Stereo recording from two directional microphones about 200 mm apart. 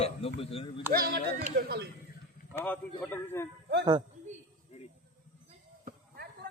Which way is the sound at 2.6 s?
10° left (ahead or behind).